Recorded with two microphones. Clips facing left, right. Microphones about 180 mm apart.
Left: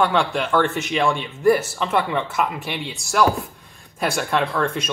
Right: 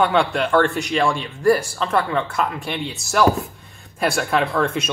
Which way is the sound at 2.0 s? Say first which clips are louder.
Right 1 dB; 15° left (ahead or behind).